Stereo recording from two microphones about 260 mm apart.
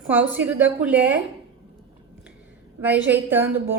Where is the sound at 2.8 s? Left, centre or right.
Centre.